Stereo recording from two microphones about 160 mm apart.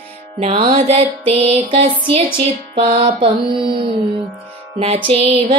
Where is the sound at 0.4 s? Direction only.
40° right (ahead or behind).